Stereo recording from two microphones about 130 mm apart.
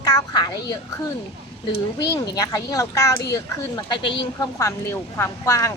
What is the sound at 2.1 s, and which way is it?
A woman's voice, 25° left (ahead or behind).